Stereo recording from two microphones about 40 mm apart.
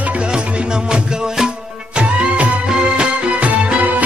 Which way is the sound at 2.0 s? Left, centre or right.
Right.